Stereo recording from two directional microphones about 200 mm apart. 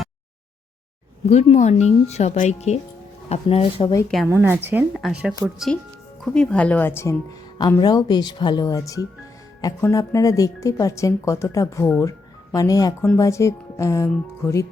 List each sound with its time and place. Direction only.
1.3 s a woman's voice: 30° left (ahead or behind)
4.3 s speech: 10° right (ahead or behind)
6.2 s a woman's voice: 5° left (ahead or behind)